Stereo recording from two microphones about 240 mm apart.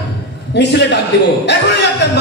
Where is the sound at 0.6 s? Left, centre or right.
Left.